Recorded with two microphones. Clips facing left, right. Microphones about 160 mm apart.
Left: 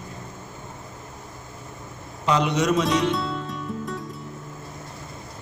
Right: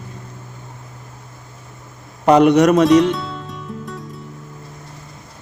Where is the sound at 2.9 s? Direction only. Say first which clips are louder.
Right 9 dB; centre (ahead or behind).